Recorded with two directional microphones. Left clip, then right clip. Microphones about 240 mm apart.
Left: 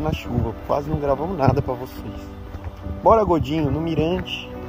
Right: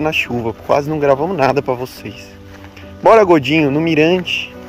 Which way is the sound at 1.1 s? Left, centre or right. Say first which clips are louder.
Right 5 dB; right.